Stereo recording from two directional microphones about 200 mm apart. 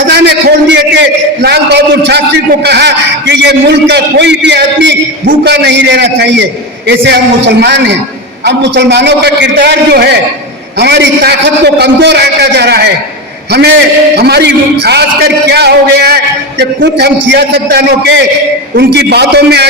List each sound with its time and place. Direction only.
0.1 s a man's voice: 55° right (ahead or behind)